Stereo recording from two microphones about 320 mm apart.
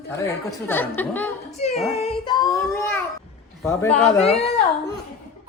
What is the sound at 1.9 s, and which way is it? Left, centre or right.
Child singing, centre.